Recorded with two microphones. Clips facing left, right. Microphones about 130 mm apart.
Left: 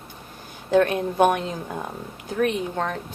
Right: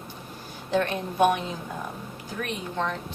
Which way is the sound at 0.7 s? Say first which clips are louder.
Left 6 dB; 45° left (ahead or behind).